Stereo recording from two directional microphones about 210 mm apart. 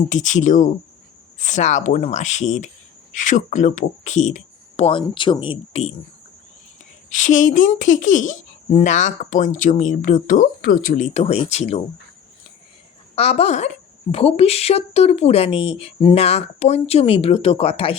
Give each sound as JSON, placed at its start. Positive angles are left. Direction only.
{"t": 0.1, "sound": "speech", "side_deg": 35}
{"t": 7.1, "sound": "speech", "side_deg": 35}
{"t": 13.1, "sound": "speech", "side_deg": 30}